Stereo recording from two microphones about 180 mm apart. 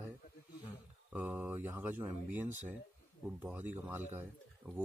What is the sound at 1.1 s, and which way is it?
Speech, 10° right (ahead or behind).